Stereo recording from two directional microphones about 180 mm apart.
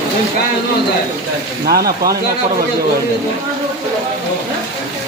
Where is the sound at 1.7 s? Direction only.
60° right (ahead or behind).